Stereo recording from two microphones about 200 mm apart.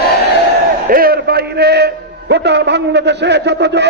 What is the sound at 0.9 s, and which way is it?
A man's voice, 45° right (ahead or behind).